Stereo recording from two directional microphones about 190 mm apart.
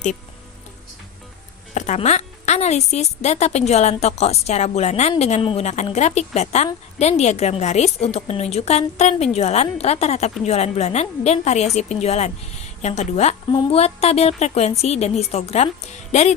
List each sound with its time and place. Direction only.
1.7 s a woman's voice: 40° left (ahead or behind)